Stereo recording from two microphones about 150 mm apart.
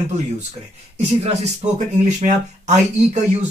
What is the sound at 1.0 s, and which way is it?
Speech, 45° right (ahead or behind).